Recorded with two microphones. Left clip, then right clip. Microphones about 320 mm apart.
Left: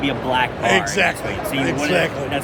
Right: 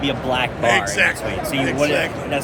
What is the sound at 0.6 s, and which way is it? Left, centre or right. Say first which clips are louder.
Speech: right 2 dB; centre.